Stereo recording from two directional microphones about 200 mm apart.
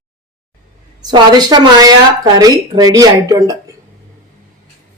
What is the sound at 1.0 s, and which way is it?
Speech, 20° right (ahead or behind).